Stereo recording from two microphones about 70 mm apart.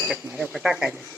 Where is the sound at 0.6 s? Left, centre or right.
Centre.